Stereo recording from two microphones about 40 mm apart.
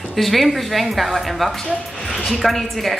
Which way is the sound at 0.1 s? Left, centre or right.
Centre.